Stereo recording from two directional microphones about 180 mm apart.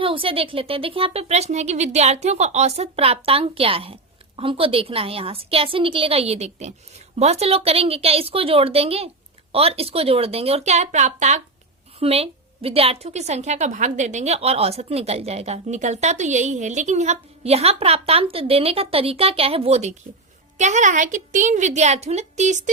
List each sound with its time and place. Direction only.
0.0 s a woman's voice: 30° right (ahead or behind)